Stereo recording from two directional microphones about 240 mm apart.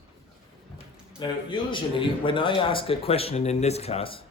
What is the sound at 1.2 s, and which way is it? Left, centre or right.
Speech, centre.